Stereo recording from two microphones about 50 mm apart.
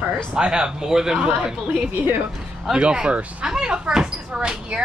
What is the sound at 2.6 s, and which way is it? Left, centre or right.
A man's voice, centre.